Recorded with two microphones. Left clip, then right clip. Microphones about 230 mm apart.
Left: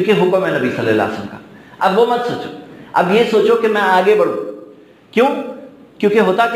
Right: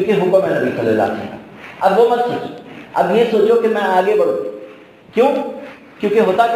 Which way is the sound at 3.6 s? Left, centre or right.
Left.